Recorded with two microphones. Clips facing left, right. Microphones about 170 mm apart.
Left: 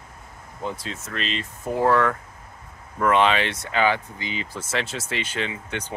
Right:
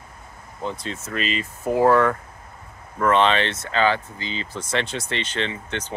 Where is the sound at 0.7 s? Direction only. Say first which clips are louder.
Right 2 dB; 5° left (ahead or behind).